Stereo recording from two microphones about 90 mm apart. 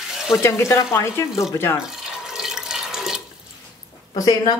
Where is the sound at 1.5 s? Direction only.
30° left (ahead or behind).